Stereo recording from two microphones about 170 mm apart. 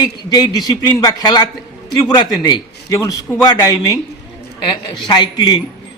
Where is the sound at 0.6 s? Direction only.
25° left (ahead or behind).